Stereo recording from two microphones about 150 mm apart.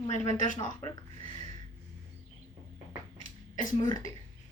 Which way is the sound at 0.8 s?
35° left (ahead or behind).